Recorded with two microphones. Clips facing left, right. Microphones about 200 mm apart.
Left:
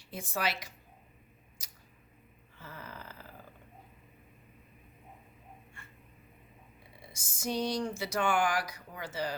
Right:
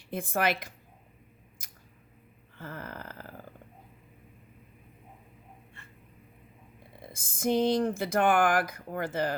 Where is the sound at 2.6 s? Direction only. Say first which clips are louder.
Right 6 dB; 55° right (ahead or behind).